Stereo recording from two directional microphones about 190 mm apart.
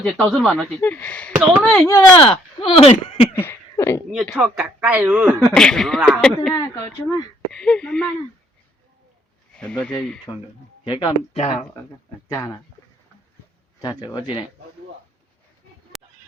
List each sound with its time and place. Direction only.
0.0 s speech: 5° left (ahead or behind)
1.3 s speech: 15° right (ahead or behind)
1.7 s speech: 10° left (ahead or behind)
2.1 s speech: 25° left (ahead or behind)
3.3 s a sound: 10° left (ahead or behind)
4.4 s speech: 5° right (ahead or behind)
5.4 s speech: 5° left (ahead or behind)
6.5 s speech: 15° left (ahead or behind)
7.5 s speech: 5° left (ahead or behind)
9.6 s speech: 5° left (ahead or behind)
10.8 s speech: 25° left (ahead or behind)
13.8 s speech: 20° left (ahead or behind)
15.9 s a sound: centre (ahead or behind)